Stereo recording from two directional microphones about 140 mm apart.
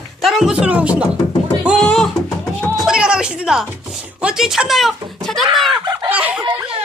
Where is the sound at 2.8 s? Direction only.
5° right (ahead or behind).